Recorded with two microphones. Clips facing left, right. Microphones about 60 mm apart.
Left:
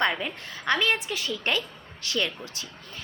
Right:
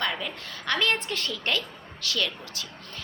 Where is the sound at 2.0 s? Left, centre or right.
Left.